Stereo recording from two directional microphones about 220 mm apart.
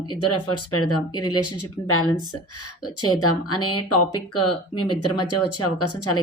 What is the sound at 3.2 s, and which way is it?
Speech, 85° left.